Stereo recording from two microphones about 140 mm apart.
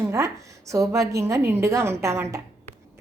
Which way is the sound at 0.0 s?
20° right (ahead or behind).